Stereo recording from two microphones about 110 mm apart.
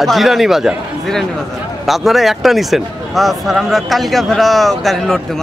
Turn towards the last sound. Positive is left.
turn(degrees=0)  # may be behind; listen again after turning